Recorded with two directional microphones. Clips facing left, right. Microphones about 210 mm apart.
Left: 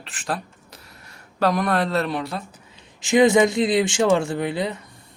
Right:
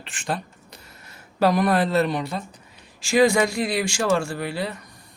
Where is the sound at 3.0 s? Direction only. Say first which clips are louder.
Left 3 dB; 20° left (ahead or behind).